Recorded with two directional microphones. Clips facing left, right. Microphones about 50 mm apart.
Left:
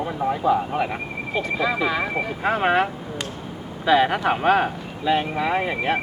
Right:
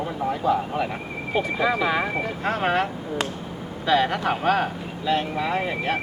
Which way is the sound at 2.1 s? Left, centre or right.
Centre.